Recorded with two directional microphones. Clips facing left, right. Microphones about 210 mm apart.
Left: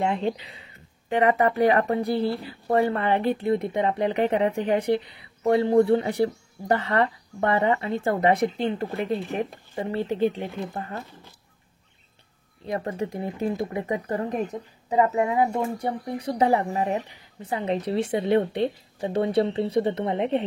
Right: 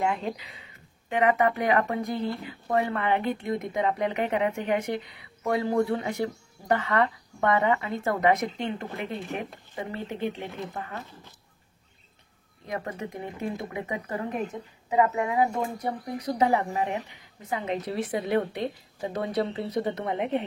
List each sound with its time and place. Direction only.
0.0 s speech: 30° left (ahead or behind)
12.6 s speech: 35° left (ahead or behind)